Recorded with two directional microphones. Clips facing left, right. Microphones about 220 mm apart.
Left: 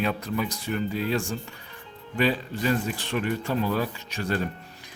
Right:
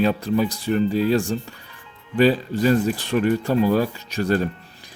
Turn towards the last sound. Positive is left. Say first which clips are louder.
# right 7 dB
turn(degrees=-40)  # may be behind; listen again after turning